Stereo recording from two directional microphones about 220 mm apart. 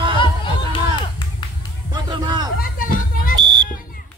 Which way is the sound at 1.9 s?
20° right (ahead or behind).